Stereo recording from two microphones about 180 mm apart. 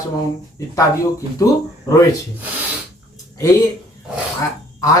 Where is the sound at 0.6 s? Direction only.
20° left (ahead or behind).